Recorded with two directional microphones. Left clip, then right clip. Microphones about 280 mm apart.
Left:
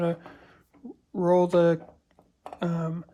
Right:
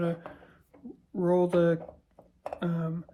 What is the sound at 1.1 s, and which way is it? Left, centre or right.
Speech, left.